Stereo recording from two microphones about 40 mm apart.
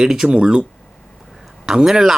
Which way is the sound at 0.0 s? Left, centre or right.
Centre.